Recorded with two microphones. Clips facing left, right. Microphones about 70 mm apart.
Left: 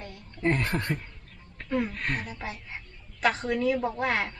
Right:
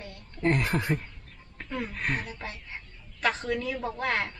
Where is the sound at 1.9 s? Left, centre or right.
Centre.